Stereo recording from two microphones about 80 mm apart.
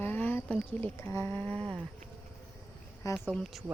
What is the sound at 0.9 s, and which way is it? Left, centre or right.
Speech, left.